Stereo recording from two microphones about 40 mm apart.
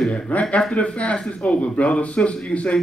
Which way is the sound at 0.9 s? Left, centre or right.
Left.